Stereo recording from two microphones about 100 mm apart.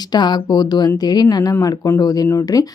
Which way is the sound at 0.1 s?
45° left (ahead or behind).